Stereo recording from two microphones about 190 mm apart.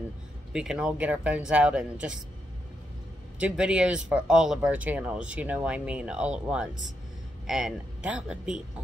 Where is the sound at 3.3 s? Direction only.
5° right (ahead or behind).